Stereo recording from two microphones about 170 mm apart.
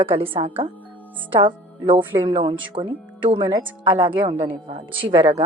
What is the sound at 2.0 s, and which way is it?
Speech, 10° right (ahead or behind).